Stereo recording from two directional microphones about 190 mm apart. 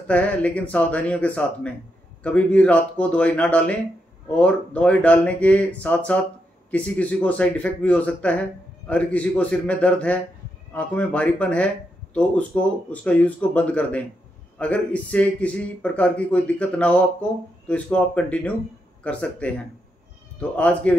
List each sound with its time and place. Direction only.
0.1 s a man's voice: 5° left (ahead or behind)